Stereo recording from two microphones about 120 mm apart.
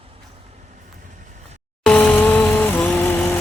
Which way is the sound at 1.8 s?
10° left (ahead or behind).